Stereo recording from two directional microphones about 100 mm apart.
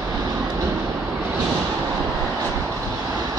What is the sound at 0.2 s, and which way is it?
Vehicle, 35° right (ahead or behind).